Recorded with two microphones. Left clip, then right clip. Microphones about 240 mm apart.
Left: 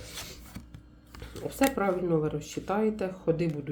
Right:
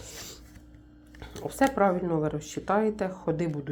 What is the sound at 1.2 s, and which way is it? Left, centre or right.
Speech, right.